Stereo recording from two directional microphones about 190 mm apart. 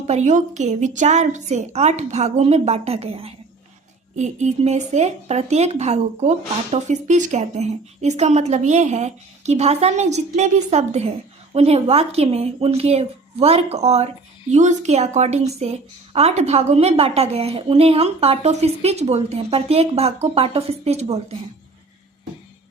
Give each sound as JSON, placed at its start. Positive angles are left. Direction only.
{"t": 0.1, "sound": "speech", "side_deg": -40}